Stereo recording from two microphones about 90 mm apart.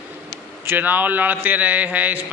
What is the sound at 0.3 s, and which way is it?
A man's voice, 25° right (ahead or behind).